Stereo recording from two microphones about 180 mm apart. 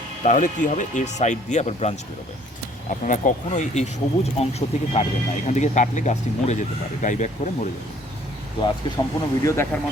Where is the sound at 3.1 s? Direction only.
45° left (ahead or behind).